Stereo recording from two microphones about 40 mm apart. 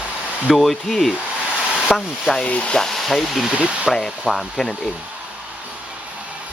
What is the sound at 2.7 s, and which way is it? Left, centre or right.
Speech, centre.